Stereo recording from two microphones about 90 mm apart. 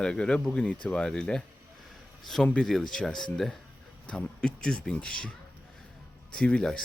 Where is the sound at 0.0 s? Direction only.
10° left (ahead or behind).